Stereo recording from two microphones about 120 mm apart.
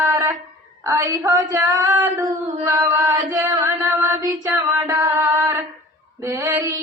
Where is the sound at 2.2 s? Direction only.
20° right (ahead or behind).